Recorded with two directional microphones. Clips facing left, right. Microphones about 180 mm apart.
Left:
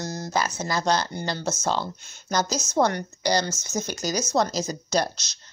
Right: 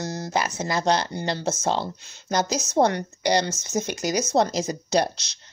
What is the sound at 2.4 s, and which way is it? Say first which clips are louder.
Speech: right 2 dB; 60° right (ahead or behind).